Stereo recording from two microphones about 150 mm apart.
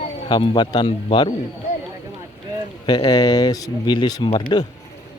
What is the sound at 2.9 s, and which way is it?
Speech, 30° left (ahead or behind).